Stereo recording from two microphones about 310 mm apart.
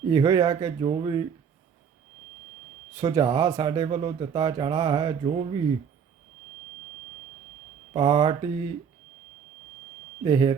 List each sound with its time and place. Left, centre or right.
0.1 s speech: centre
3.0 s speech: centre
7.9 s speech: centre
10.2 s speech: centre